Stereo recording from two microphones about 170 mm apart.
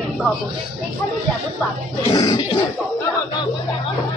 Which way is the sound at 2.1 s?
25° left (ahead or behind).